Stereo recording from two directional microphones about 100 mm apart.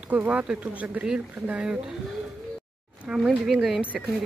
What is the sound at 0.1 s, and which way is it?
Speech, 15° right (ahead or behind).